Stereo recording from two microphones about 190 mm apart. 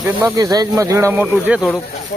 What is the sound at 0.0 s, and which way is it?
Speech, 15° right (ahead or behind).